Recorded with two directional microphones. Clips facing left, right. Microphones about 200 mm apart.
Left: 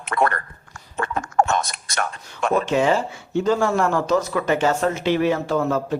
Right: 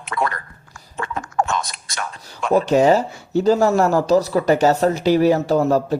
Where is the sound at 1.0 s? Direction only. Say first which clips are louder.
Left 2 dB; 55° left (ahead or behind).